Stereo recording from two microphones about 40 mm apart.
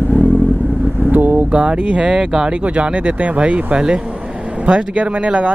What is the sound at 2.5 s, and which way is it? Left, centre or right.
Speech, right.